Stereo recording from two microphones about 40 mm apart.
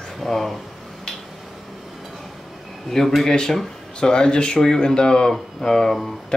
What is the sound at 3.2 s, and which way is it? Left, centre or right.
Speech, centre.